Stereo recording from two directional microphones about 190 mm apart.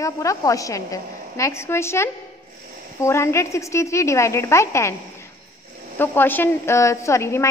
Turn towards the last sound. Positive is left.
turn(degrees=15)  # may be behind; listen again after turning